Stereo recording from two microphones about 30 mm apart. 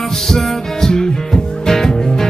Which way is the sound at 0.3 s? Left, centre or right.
Centre.